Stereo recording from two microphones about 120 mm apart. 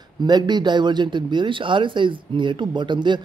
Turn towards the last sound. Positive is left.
turn(degrees=-40)  # may be behind; listen again after turning